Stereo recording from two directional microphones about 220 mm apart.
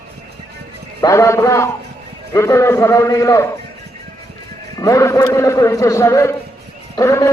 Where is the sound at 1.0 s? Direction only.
15° left (ahead or behind).